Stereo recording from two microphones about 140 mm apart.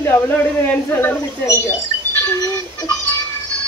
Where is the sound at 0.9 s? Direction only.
20° left (ahead or behind).